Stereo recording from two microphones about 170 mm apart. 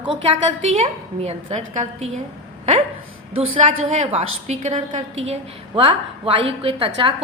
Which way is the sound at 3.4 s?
40° right (ahead or behind).